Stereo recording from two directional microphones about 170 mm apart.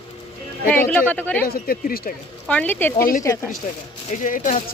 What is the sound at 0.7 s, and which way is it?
Speech, 10° left (ahead or behind).